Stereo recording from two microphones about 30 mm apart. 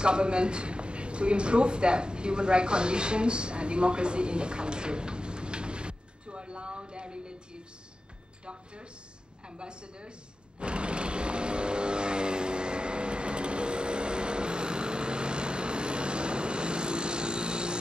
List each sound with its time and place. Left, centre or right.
0.0 s speech: right
9.5 s a woman's voice: right
10.6 s vehicle: right